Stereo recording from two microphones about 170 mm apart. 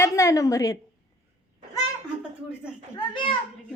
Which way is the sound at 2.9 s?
30° left (ahead or behind).